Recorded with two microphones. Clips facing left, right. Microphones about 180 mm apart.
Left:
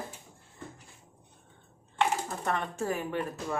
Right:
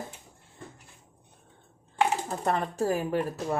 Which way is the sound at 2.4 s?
35° right (ahead or behind).